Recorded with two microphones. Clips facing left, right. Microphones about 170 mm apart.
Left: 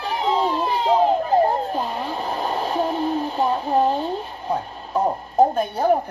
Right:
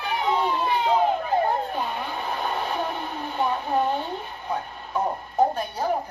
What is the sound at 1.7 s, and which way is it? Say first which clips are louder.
Radio: left 4 dB; 35° left (ahead or behind).